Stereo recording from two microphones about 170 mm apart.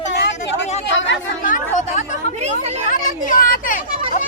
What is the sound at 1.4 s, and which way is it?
Chatter, 50° left (ahead or behind).